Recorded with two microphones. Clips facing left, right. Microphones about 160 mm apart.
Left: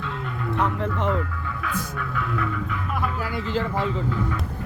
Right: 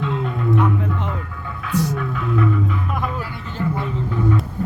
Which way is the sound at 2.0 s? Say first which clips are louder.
Right 6 dB; 25° right (ahead or behind).